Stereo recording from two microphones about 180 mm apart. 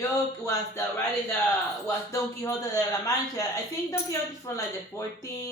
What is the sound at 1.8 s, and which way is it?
Speech, 15° left (ahead or behind).